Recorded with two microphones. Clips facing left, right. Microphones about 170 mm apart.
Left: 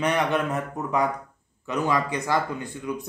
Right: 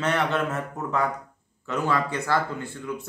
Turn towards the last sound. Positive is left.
turn(degrees=15)  # may be behind; listen again after turning